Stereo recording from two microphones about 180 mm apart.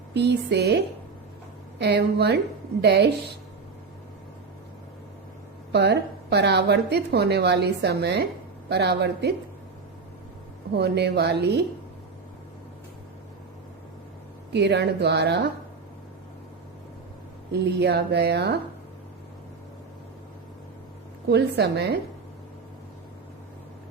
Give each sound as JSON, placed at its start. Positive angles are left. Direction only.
{"t": 0.1, "sound": "a woman's voice", "side_deg": -70}
{"t": 5.7, "sound": "a woman's voice", "side_deg": -70}
{"t": 10.8, "sound": "a woman's voice", "side_deg": -65}
{"t": 14.5, "sound": "a woman's voice", "side_deg": -70}
{"t": 17.5, "sound": "a woman's voice", "side_deg": -65}
{"t": 21.2, "sound": "a woman's voice", "side_deg": -65}